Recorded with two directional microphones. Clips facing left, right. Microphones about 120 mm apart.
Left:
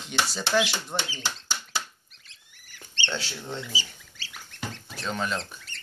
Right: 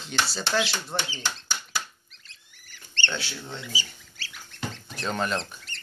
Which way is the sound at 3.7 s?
25° left (ahead or behind).